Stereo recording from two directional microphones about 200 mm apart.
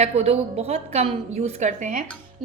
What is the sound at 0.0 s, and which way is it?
A woman's voice, 30° right (ahead or behind).